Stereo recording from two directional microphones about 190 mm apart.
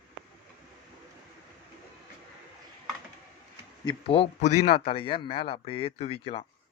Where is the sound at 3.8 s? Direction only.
25° left (ahead or behind).